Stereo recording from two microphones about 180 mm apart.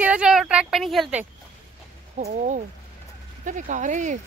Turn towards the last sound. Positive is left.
turn(degrees=-45)  # may be behind; listen again after turning